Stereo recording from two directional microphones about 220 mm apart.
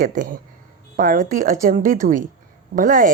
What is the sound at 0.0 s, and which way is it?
Speech, 40° right (ahead or behind).